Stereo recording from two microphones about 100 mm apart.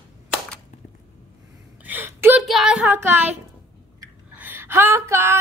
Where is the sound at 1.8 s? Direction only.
20° right (ahead or behind).